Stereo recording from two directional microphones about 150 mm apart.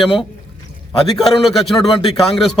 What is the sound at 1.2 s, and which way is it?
A man's voice, centre (ahead or behind).